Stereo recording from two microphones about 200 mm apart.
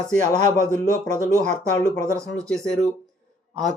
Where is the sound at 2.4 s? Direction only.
5° left (ahead or behind).